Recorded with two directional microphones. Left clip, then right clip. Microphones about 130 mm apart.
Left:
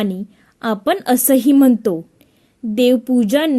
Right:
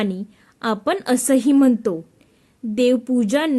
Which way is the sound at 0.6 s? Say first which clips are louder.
Left 3 dB; 25° left (ahead or behind).